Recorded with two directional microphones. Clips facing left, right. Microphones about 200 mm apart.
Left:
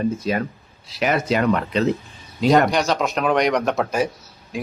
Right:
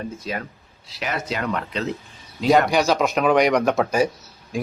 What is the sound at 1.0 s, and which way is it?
Speech, 60° left (ahead or behind).